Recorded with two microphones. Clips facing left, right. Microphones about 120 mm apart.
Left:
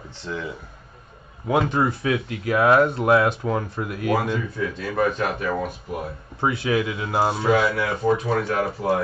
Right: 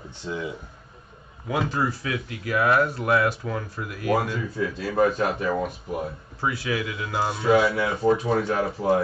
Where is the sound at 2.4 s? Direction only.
25° left (ahead or behind).